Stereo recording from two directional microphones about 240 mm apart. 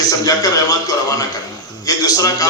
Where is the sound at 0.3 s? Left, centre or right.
Centre.